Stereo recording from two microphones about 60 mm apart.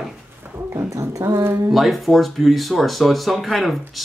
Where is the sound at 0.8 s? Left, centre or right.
Right.